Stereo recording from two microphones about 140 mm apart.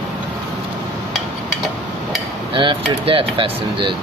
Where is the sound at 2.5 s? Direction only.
35° right (ahead or behind).